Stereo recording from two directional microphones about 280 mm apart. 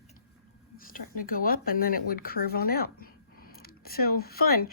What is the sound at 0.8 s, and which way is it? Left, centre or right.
Speech, left.